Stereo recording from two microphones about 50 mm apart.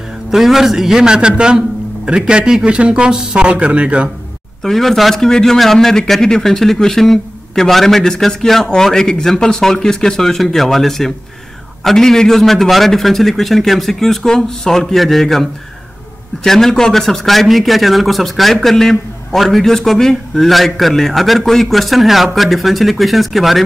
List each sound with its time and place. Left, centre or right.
0.3 s a man's voice: centre; by 4.1 s right
4.6 s a man's voice: centre
16.4 s a man's voice: centre